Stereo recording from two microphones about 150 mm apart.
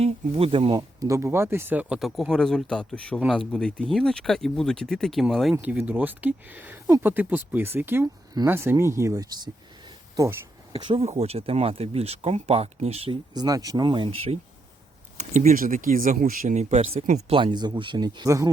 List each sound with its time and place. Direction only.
0.0 s speech: 40° right (ahead or behind); by 5.5 s centre (ahead or behind)
5.5 s speech: 10° right (ahead or behind); by 11.0 s 35° right (ahead or behind)
11.0 s speech: 45° right (ahead or behind)
13.3 s speech: 25° right (ahead or behind)
15.2 s speech: 50° right (ahead or behind); by 18.5 s 25° right (ahead or behind)